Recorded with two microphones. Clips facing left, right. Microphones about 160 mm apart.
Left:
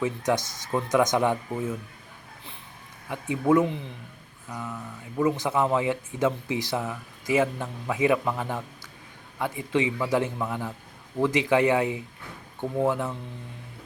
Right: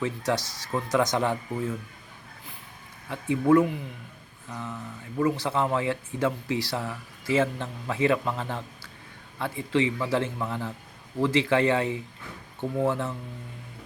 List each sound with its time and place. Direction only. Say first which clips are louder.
0.3 s speech: left 3 dB; 20° left (ahead or behind)
3.1 s speech: right 1 dB; 15° left (ahead or behind)
5.1 s speech: left 1 dB; 20° left (ahead or behind)